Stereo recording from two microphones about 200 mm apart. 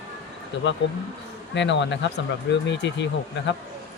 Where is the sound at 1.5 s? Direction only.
65° left (ahead or behind).